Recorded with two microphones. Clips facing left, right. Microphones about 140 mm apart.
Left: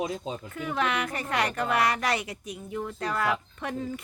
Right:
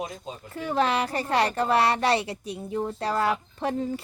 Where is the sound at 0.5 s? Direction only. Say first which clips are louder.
Right 5 dB; 30° right (ahead or behind).